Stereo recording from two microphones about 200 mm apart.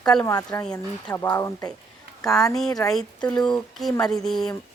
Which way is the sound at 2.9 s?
5° left (ahead or behind).